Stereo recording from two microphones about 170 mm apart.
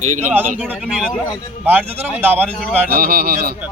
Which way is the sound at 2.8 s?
60° right (ahead or behind).